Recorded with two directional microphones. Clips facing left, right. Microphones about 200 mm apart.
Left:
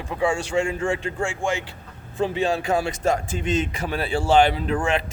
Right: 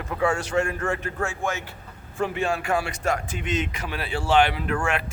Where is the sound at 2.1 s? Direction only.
25° left (ahead or behind).